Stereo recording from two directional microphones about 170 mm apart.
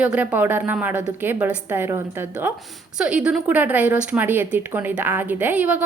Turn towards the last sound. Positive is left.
turn(degrees=-10)  # may be behind; listen again after turning